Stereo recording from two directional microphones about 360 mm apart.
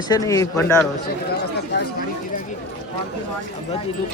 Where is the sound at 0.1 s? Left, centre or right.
Centre.